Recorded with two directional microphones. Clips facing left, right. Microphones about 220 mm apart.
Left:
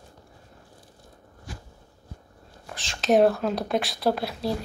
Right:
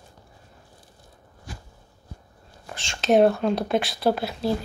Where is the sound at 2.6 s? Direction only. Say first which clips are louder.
Right 1 dB; centre (ahead or behind).